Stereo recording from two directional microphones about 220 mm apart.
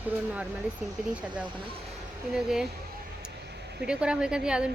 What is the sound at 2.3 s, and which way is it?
Speech, 5° right (ahead or behind).